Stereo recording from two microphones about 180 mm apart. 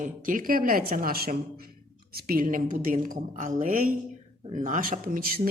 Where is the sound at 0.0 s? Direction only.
50° right (ahead or behind).